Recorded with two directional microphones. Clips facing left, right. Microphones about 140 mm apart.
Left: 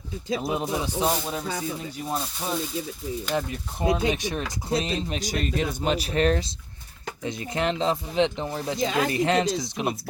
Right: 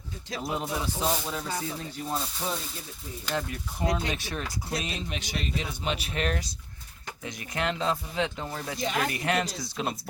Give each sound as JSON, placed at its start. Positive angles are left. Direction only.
{"t": 0.3, "sound": "speech", "side_deg": 20}
{"t": 3.3, "sound": "speech", "side_deg": 20}
{"t": 4.7, "sound": "speech", "side_deg": 30}